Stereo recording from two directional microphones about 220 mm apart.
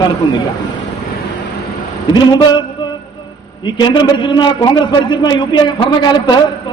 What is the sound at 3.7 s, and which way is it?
A man's voice, 20° left (ahead or behind).